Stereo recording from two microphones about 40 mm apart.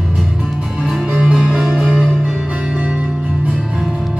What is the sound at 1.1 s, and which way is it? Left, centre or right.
Music, right.